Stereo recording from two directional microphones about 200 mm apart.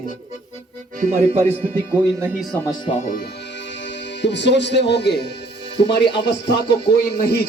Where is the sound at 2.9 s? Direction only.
40° left (ahead or behind).